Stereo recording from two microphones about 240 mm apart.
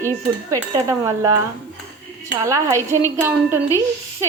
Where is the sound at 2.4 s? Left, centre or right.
Centre.